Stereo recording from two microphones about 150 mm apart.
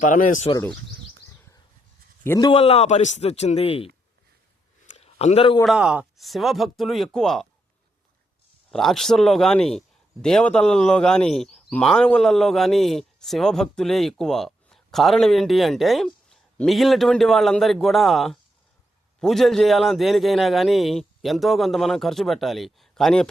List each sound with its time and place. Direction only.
0.0 s speech: 60° left (ahead or behind)
0.5 s speech: 25° left (ahead or behind)
2.4 s a man's voice: 40° left (ahead or behind)
4.9 s a sound: 45° left (ahead or behind)
5.6 s a man's voice: 5° right (ahead or behind)
8.7 s a man's voice: centre (ahead or behind)